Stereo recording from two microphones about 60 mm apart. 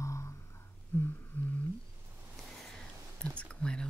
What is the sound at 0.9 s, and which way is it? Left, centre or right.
Humming, left.